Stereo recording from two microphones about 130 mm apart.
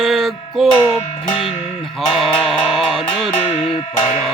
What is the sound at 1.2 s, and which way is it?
Music, 50° left (ahead or behind).